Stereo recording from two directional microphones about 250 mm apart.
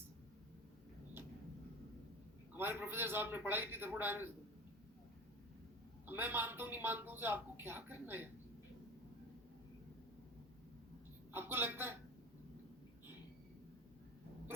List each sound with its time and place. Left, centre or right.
2.5 s speech: centre
6.1 s speech: centre
11.3 s a man's voice: centre